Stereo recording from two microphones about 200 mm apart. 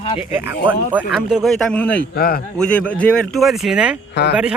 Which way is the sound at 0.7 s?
5° right (ahead or behind).